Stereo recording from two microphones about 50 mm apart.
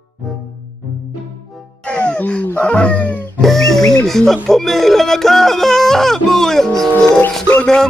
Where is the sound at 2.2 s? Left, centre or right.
Left.